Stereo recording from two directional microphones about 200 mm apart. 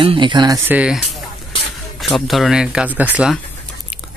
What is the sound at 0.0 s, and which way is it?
Speech, 25° right (ahead or behind).